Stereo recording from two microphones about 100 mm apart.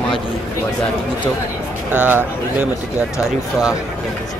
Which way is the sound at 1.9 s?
15° right (ahead or behind).